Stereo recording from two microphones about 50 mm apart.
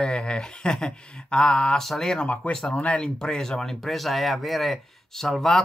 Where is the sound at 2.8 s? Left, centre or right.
Left.